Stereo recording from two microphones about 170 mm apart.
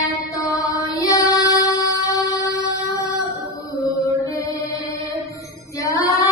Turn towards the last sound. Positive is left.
turn(degrees=20)  # may be behind; listen again after turning